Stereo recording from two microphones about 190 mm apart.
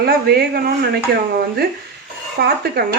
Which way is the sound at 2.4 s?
55° right (ahead or behind).